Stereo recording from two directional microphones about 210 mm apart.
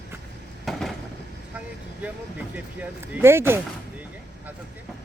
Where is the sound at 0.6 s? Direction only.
Centre (ahead or behind).